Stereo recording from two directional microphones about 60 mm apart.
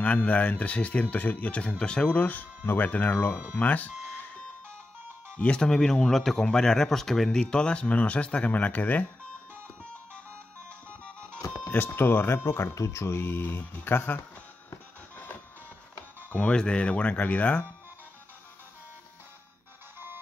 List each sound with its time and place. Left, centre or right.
0.0 s speech: left
5.4 s speech: centre
11.7 s speech: left
12.7 s speech: left
16.3 s speech: left